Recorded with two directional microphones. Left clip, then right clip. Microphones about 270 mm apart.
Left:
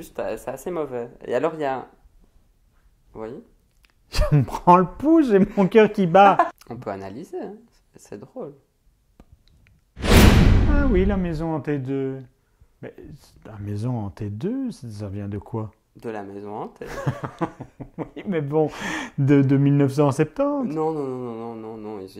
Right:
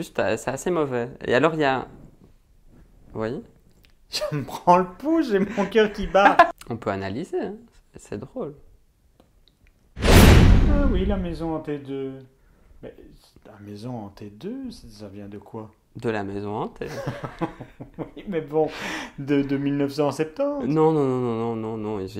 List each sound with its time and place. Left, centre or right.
0.0 s speech: right
3.1 s a sound: right
4.1 s speech: left
6.6 s speech: right
10.0 s whoosh: centre
11.0 s speech: left
16.0 s speech: right
16.9 s speech: left
20.7 s speech: right